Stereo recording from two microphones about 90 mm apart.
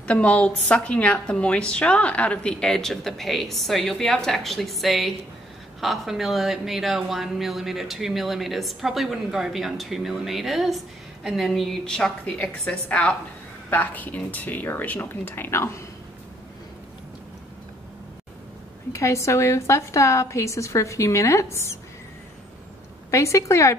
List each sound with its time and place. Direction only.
0.0 s a woman's voice: 15° left (ahead or behind)
18.9 s a woman's voice: 35° left (ahead or behind)
23.1 s a woman's voice: 35° left (ahead or behind)